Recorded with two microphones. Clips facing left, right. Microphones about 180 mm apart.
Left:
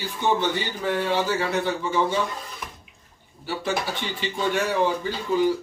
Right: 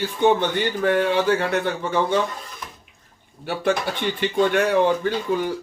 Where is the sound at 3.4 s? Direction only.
60° right (ahead or behind).